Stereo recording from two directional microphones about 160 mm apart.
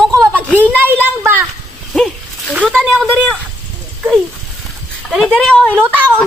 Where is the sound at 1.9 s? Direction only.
Centre (ahead or behind).